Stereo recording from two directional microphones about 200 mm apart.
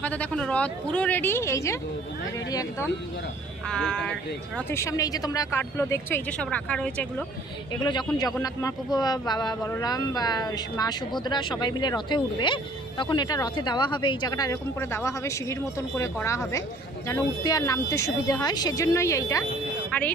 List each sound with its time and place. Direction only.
0.0 s speech: 5° left (ahead or behind)
3.7 s speech: 5° left (ahead or behind)
7.8 s speech: 20° left (ahead or behind)